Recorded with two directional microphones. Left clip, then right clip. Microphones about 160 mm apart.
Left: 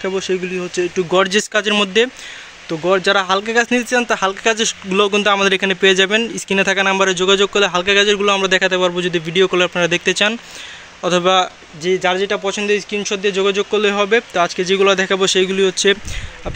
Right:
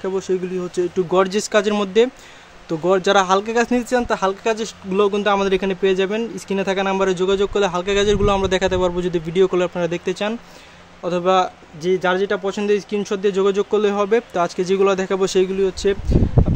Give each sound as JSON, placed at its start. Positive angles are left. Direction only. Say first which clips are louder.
{"t": 0.1, "sound": "speech", "louder": "left 2 dB", "side_deg": -10}
{"t": 11.8, "sound": "speech", "louder": "left 2 dB", "side_deg": -20}